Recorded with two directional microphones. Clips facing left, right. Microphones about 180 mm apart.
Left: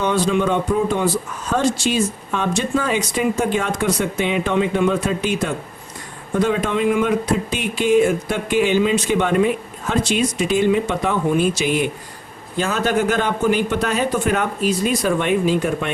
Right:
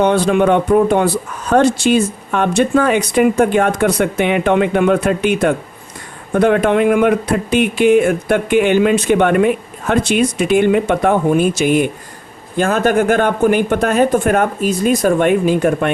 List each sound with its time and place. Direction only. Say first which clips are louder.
0.0 s speech: right 6 dB; 60° right (ahead or behind)